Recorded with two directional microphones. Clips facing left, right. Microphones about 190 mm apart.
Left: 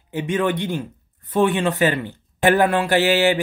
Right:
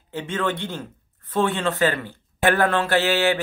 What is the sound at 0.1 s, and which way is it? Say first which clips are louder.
Speech: left 5 dB; 15° left (ahead or behind).